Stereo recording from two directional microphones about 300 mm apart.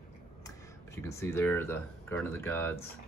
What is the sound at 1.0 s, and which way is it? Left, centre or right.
Speech, centre.